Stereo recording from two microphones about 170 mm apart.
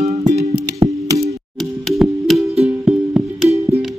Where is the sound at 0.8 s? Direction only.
20° right (ahead or behind).